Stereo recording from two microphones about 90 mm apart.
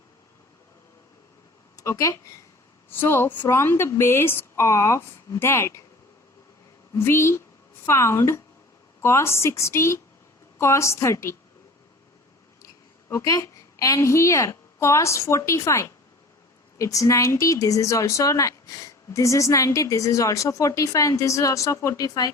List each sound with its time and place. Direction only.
1.7 s speech: 35° left (ahead or behind)
2.9 s speech: 25° left (ahead or behind)
6.9 s speech: 30° left (ahead or behind)
13.1 s a woman's voice: 35° left (ahead or behind)